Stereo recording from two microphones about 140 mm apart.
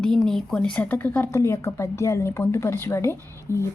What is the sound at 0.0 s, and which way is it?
A woman's voice, 5° left (ahead or behind).